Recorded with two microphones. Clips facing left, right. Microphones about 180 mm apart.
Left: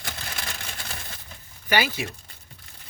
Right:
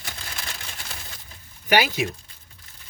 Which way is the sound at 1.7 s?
15° right (ahead or behind).